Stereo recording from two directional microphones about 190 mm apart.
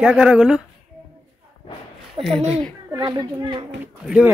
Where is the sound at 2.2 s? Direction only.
30° right (ahead or behind).